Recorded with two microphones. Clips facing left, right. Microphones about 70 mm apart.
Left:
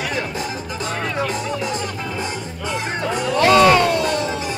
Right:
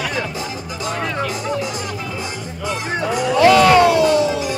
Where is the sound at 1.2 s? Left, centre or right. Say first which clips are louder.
Right 1 dB; left.